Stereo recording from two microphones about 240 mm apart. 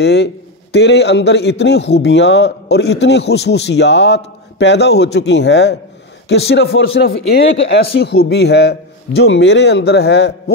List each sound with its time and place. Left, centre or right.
0.0 s a man's voice: left